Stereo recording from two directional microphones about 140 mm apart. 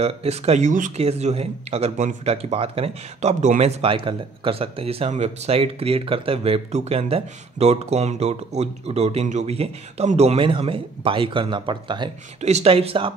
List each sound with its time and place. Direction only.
0.0 s speech: 50° right (ahead or behind); by 0.9 s 65° right (ahead or behind)
0.9 s speech: 50° right (ahead or behind)
12.4 s speech: 50° right (ahead or behind)